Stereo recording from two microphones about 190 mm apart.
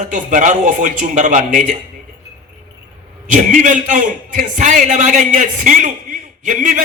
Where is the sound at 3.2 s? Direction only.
40° right (ahead or behind).